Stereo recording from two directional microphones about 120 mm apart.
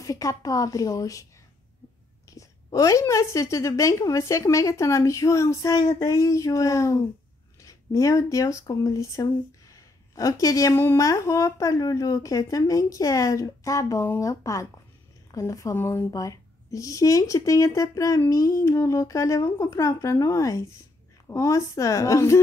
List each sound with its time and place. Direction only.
0.0 s a woman's voice: 30° left (ahead or behind)
2.3 s a woman's voice: 25° left (ahead or behind)